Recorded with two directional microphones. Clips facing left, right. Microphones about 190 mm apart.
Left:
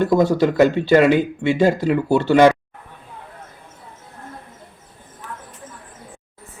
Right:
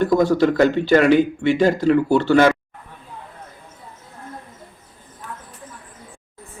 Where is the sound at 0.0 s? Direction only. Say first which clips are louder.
Even; 25° left (ahead or behind).